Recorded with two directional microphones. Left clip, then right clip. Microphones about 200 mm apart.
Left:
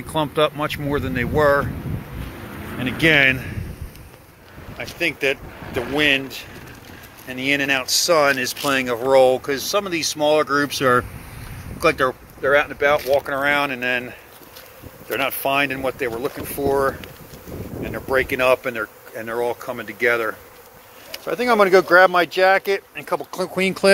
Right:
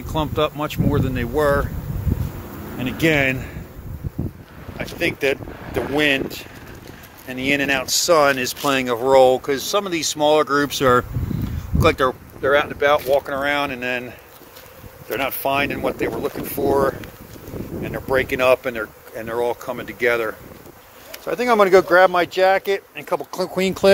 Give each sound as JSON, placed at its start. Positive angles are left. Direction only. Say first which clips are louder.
{"t": 0.1, "sound": "speech", "louder": "left 2 dB", "side_deg": -5}
{"t": 2.8, "sound": "speech", "louder": "left 3 dB", "side_deg": -10}
{"t": 4.9, "sound": "speech", "louder": "even", "side_deg": -15}
{"t": 15.1, "sound": "speech", "louder": "left 1 dB", "side_deg": 0}